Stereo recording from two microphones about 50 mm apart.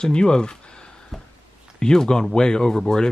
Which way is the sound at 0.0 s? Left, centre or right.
Centre.